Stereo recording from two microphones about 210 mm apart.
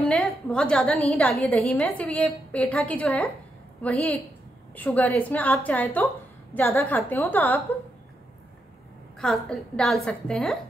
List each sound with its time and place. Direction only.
0.1 s a woman's voice: 5° left (ahead or behind)
9.2 s a woman's voice: centre (ahead or behind)